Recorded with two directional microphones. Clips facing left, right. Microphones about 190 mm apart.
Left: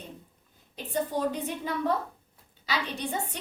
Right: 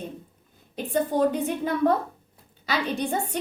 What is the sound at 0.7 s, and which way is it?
A woman's voice, 55° right (ahead or behind).